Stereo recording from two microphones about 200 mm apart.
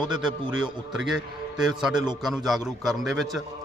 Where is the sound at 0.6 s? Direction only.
Centre (ahead or behind).